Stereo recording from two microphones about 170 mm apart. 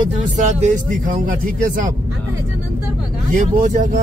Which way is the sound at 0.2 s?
45° right (ahead or behind).